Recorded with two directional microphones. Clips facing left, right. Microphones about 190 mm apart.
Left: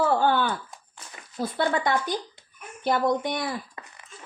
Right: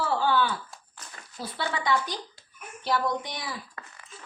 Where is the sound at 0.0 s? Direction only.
50° left (ahead or behind).